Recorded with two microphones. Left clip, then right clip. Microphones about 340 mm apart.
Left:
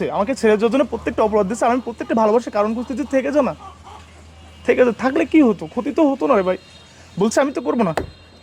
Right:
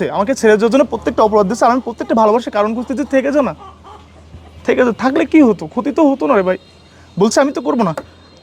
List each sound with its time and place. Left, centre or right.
0.0 s speech: right
4.6 s speech: right